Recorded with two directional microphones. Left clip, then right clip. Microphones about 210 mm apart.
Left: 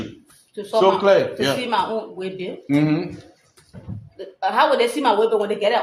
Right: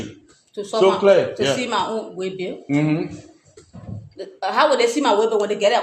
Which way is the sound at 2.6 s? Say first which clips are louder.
Left 1 dB; 20° left (ahead or behind).